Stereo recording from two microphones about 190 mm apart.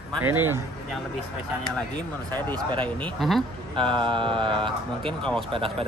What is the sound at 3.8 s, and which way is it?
Mantra, 25° right (ahead or behind).